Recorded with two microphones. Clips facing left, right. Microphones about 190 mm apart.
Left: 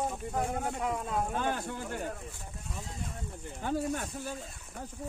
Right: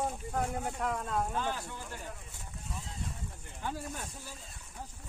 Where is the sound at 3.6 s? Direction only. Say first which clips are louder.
Left 7 dB; 60° left (ahead or behind).